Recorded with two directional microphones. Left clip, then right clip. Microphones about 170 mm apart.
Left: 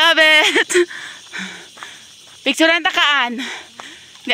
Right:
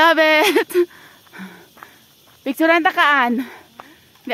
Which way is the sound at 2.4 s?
Centre (ahead or behind).